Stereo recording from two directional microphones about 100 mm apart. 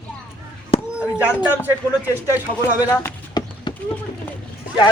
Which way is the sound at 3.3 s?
40° left (ahead or behind).